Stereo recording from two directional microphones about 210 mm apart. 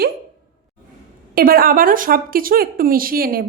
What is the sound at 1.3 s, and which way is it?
A woman's voice, 45° right (ahead or behind).